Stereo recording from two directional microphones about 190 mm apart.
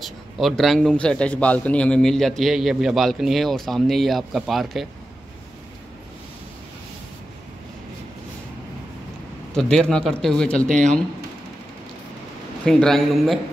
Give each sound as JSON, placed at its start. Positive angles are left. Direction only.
{"t": 0.0, "sound": "a man's voice", "side_deg": 0}
{"t": 9.5, "sound": "a man's voice", "side_deg": 5}
{"t": 12.6, "sound": "a man's voice", "side_deg": 0}